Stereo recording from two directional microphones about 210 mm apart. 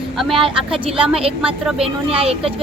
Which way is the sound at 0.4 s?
25° right (ahead or behind).